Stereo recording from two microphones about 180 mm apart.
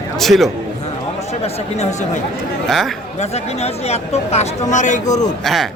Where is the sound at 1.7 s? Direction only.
40° left (ahead or behind).